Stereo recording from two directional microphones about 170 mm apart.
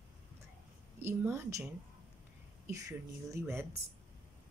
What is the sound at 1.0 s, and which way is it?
A woman's voice, 15° right (ahead or behind).